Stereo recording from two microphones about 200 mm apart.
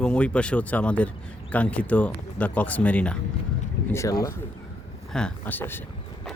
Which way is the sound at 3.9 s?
15° left (ahead or behind).